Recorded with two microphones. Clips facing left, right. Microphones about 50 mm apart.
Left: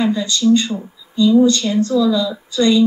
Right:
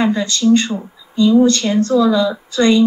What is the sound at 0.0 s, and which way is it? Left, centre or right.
Speech, right.